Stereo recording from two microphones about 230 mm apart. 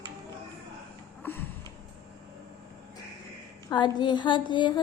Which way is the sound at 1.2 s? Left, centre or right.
Centre.